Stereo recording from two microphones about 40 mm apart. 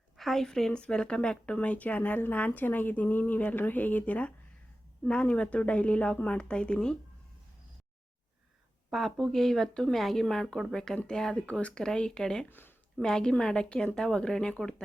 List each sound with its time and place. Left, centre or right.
0.2 s a woman's voice: centre
0.7 s speech: left
1.5 s a woman's voice: left
8.9 s speech: centre
9.9 s speech: centre
12.5 s speech: left
13.0 s speech: centre